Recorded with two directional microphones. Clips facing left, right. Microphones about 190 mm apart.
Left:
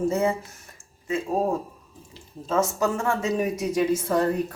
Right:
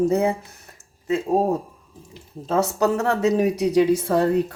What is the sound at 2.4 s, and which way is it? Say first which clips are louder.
Speech: right 3 dB; 70° right (ahead or behind).